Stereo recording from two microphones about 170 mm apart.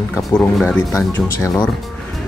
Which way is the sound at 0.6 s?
15° left (ahead or behind).